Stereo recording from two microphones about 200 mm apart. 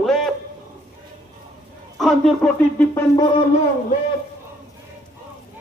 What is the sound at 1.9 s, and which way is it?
Speech, centre (ahead or behind).